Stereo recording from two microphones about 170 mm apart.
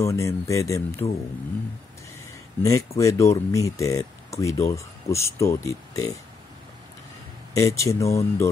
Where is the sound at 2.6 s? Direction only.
20° left (ahead or behind).